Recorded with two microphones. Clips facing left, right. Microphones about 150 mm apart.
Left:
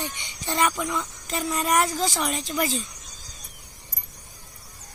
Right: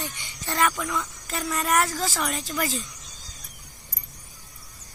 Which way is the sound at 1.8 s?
20° left (ahead or behind).